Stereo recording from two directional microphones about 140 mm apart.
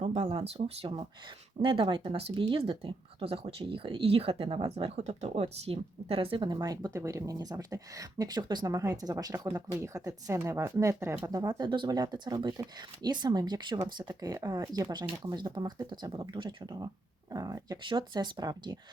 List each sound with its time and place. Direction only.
0.0 s speech: 50° right (ahead or behind); by 18.8 s 25° right (ahead or behind)